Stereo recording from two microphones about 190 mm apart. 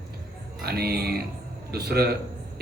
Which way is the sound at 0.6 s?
55° right (ahead or behind).